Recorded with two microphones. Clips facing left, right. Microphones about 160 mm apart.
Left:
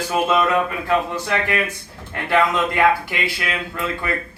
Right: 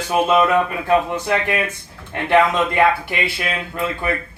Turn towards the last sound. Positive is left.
turn(degrees=-25)  # may be behind; listen again after turning